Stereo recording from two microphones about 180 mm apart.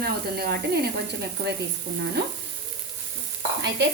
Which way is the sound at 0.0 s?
60° right (ahead or behind).